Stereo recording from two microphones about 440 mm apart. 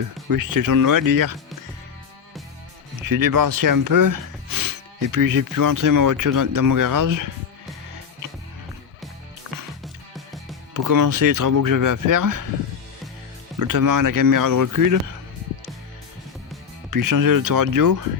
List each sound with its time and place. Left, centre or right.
0.3 s speech: right
3.1 s speech: right
10.8 s speech: right
13.6 s speech: right
16.9 s speech: right